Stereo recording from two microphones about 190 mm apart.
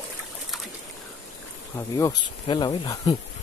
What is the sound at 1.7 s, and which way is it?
Speech, 15° left (ahead or behind).